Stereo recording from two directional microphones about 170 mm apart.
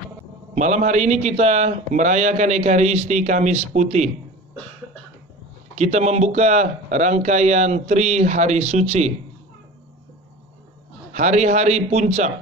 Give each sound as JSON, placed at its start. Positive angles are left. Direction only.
{"t": 0.6, "sound": "a man's voice", "side_deg": -45}
{"t": 5.8, "sound": "speech", "side_deg": -40}
{"t": 11.1, "sound": "a man's voice", "side_deg": -45}